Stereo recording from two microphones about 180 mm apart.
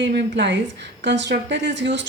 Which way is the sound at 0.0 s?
70° right (ahead or behind).